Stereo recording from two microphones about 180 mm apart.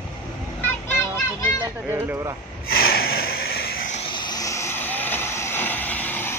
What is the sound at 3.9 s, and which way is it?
Vehicle, 30° left (ahead or behind).